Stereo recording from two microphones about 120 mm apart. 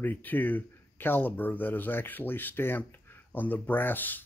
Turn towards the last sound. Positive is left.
turn(degrees=15)  # may be behind; listen again after turning